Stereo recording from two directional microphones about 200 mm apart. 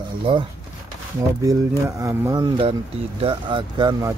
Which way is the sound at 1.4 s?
15° right (ahead or behind).